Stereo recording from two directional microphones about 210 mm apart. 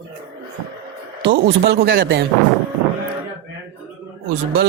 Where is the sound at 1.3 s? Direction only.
45° right (ahead or behind).